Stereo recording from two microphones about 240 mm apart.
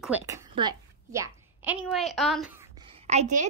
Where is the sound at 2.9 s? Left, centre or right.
Right.